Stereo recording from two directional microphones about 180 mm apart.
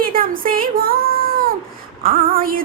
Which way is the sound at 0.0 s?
50° right (ahead or behind).